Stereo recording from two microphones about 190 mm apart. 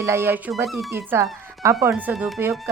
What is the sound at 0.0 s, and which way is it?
Speech, 15° right (ahead or behind).